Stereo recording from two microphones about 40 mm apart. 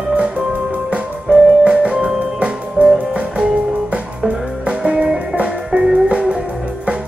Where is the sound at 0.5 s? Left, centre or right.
Right.